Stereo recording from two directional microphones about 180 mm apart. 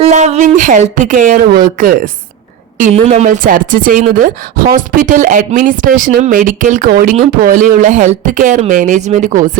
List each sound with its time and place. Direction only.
0.0 s speech: 40° right (ahead or behind)